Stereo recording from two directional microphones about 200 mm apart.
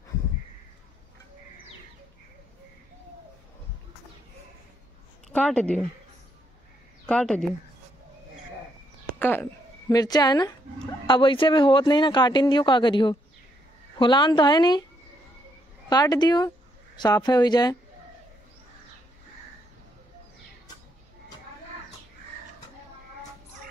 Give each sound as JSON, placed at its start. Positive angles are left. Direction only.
{"t": 5.3, "sound": "speech", "side_deg": 5}
{"t": 7.1, "sound": "speech", "side_deg": 5}
{"t": 9.2, "sound": "a woman's voice", "side_deg": 10}
{"t": 15.9, "sound": "speech", "side_deg": 20}